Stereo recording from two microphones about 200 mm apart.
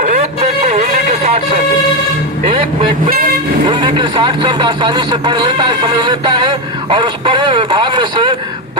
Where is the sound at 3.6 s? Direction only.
25° right (ahead or behind).